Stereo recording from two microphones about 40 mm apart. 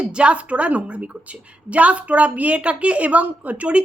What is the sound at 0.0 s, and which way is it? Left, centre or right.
A woman's voice, right.